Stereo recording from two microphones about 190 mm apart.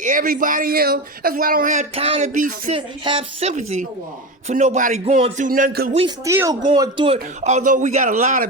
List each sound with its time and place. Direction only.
0.0 s speech: 45° right (ahead or behind)
2.7 s speech: 25° right (ahead or behind); by 5.9 s 50° right (ahead or behind)
6.2 s speech: 15° right (ahead or behind); by 8.4 s 40° right (ahead or behind)